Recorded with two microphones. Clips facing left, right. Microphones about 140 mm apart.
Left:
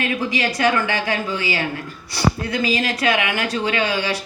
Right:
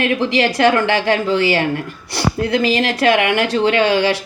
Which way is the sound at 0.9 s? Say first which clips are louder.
Right 7 dB; 70° right (ahead or behind).